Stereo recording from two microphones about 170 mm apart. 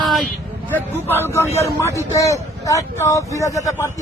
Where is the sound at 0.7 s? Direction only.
10° left (ahead or behind).